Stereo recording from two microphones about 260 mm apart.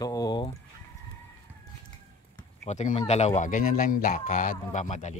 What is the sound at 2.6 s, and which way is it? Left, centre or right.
Speech, left.